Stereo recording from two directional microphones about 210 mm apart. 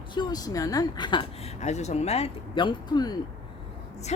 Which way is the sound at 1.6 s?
35° left (ahead or behind).